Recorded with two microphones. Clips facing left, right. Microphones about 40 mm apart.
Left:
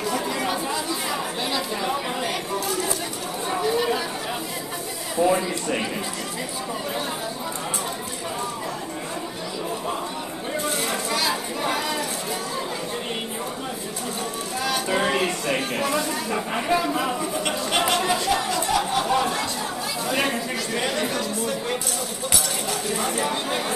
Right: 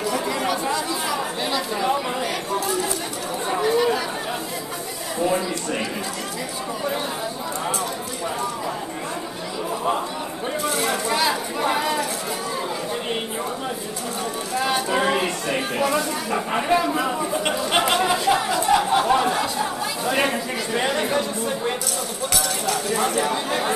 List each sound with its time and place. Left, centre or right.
1.1 s chatter: centre
3.7 s chatter: centre
5.2 s speech: centre
10.9 s a sound: centre
14.9 s a sound: centre
16.6 s speech: centre
17.2 s a sound: centre
20.1 s speech: centre
20.8 s chatter: centre